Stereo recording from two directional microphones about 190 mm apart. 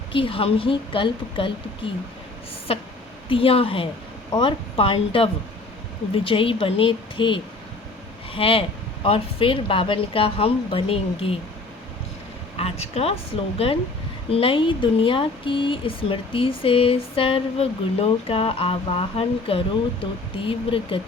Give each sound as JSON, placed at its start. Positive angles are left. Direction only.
{"t": 0.1, "sound": "speech", "side_deg": 30}
{"t": 12.5, "sound": "speech", "side_deg": 30}